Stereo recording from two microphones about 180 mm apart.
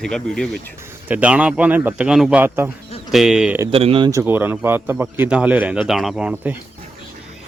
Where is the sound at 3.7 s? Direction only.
30° right (ahead or behind).